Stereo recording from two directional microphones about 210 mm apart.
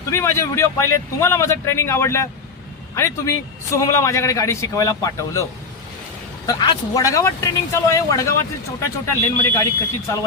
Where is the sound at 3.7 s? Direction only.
15° left (ahead or behind).